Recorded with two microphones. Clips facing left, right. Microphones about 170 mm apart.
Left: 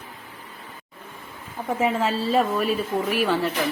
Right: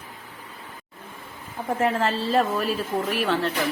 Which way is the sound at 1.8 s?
5° left (ahead or behind).